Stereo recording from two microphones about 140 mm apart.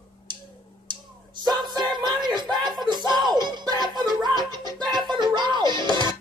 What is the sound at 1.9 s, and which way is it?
Music, 30° right (ahead or behind).